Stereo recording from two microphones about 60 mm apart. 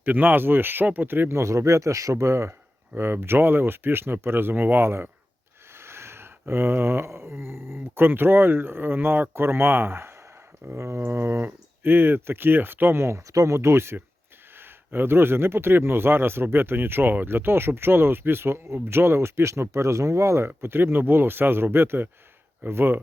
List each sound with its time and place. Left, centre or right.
0.0 s speech: right
1.4 s speech: right
2.9 s speech: right
5.7 s snort: right
6.5 s speech: right
10.8 s a sound: right
11.0 s speech: right
20.6 s speech: right